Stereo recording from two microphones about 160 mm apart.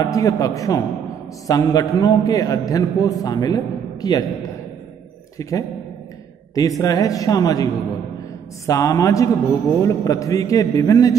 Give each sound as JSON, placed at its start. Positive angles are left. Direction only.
{"t": 0.0, "sound": "a man's voice", "side_deg": 20}
{"t": 5.4, "sound": "a man's voice", "side_deg": 20}